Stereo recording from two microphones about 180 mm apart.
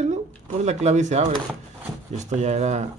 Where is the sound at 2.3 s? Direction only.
40° right (ahead or behind).